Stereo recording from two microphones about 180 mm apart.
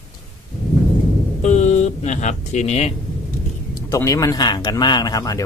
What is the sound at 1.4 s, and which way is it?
Speech, 40° left (ahead or behind).